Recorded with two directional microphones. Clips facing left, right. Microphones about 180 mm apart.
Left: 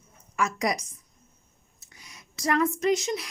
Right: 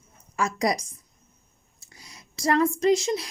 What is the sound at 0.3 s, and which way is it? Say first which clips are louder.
Speech: right 2 dB; 35° right (ahead or behind).